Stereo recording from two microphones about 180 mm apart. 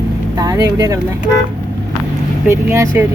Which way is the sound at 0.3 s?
20° right (ahead or behind).